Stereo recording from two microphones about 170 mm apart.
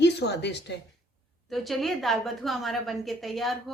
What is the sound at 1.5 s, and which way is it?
A woman's voice, centre (ahead or behind).